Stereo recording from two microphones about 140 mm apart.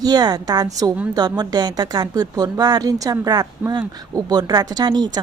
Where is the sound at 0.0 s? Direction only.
30° right (ahead or behind).